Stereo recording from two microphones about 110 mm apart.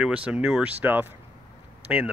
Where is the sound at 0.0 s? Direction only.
10° right (ahead or behind).